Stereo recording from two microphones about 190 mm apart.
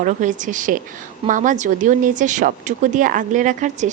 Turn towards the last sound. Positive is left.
turn(degrees=-40)  # may be behind; listen again after turning